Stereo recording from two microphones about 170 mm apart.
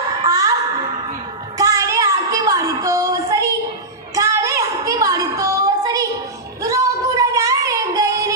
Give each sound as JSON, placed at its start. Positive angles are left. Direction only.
{"t": 0.3, "sound": "music", "side_deg": -20}
{"t": 1.5, "sound": "a sound", "side_deg": -20}
{"t": 6.6, "sound": "child singing", "side_deg": -20}